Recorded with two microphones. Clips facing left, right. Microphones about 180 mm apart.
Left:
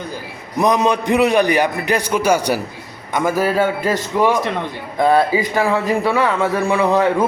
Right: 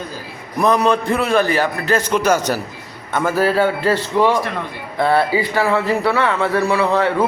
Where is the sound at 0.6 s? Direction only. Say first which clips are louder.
Even; 15° left (ahead or behind).